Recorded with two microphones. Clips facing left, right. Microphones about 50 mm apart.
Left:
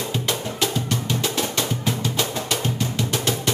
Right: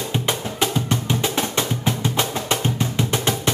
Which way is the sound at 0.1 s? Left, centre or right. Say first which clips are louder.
Right 2 dB; right.